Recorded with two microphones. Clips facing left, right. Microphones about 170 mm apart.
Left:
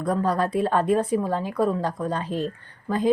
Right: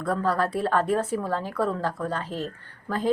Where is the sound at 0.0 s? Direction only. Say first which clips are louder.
Left 2 dB; 15° left (ahead or behind).